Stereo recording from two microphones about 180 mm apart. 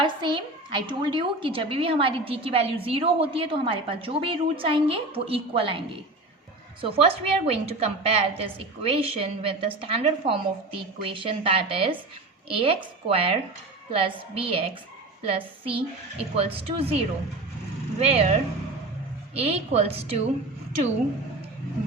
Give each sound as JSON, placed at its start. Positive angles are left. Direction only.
{"t": 0.0, "sound": "a woman's voice", "side_deg": -25}